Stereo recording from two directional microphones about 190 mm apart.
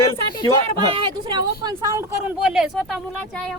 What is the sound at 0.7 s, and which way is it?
Speech, 25° right (ahead or behind).